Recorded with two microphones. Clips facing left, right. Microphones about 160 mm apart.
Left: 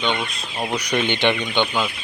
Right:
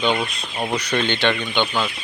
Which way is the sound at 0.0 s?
5° right (ahead or behind).